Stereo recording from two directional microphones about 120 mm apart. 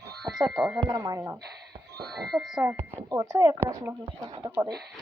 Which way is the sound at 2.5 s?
25° right (ahead or behind).